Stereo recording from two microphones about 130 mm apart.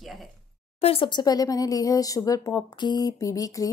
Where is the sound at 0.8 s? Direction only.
45° left (ahead or behind).